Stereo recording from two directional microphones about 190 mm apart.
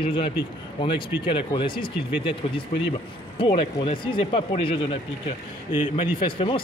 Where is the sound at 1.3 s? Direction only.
25° left (ahead or behind).